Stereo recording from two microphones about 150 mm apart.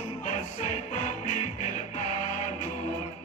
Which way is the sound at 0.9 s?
55° left (ahead or behind).